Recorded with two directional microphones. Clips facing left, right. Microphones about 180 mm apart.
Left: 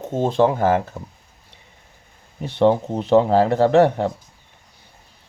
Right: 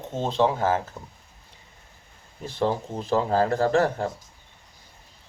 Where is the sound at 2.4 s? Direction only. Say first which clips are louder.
Left 9 dB; 65° left (ahead or behind).